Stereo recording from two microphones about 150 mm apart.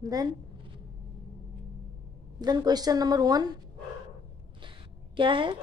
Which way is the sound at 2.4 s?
25° right (ahead or behind).